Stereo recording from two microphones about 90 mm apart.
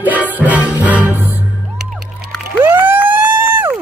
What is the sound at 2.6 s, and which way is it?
Vehicle, 25° right (ahead or behind).